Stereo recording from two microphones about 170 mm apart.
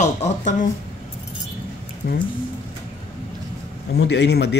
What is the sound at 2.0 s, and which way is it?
Speech, 65° left (ahead or behind).